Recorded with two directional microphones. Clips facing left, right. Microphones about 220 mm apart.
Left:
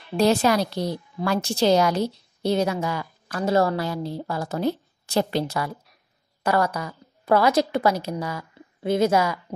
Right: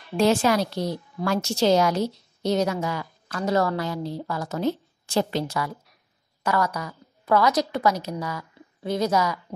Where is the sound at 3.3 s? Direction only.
30° left (ahead or behind).